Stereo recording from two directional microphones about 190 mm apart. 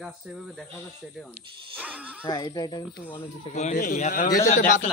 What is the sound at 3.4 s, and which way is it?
A man's voice, 40° left (ahead or behind).